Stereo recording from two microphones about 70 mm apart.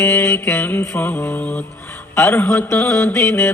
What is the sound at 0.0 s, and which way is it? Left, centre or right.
Mantra, left.